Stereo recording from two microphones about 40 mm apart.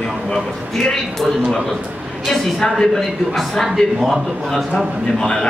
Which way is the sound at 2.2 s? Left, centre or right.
Centre.